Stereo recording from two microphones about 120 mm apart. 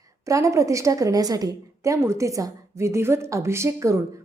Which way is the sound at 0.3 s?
25° right (ahead or behind).